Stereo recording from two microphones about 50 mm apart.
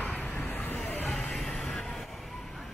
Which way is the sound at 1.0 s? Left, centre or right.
Centre.